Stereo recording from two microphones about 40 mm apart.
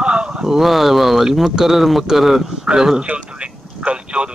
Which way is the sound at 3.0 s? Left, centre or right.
Right.